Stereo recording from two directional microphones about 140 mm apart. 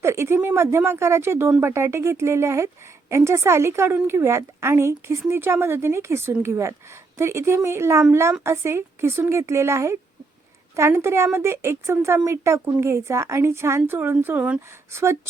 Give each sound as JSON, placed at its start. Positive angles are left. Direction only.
{"t": 0.0, "sound": "a sound", "side_deg": -20}
{"t": 0.3, "sound": "a woman's voice", "side_deg": -15}
{"t": 1.7, "sound": "a woman's voice", "side_deg": -20}